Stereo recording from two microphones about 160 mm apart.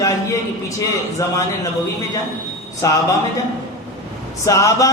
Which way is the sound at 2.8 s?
20° left (ahead or behind).